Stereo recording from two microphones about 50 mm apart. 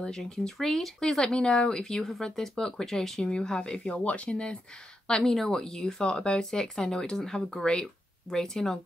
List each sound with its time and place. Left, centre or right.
0.0 s speech: centre